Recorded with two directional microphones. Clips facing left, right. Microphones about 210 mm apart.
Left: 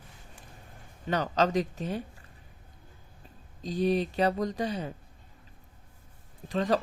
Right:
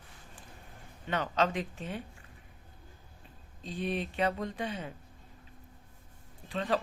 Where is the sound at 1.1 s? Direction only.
40° left (ahead or behind).